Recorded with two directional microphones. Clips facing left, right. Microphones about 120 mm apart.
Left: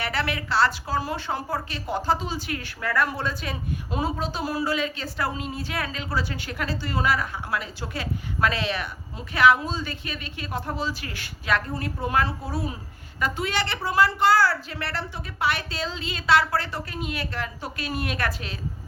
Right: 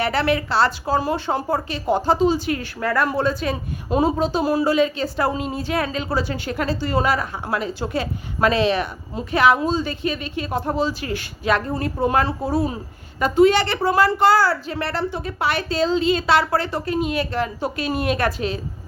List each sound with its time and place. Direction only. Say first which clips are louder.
0.0 s a woman's voice: right 8 dB; 30° right (ahead or behind)